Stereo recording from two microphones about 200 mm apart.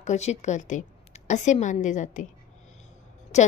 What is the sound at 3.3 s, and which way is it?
Speech, 35° left (ahead or behind).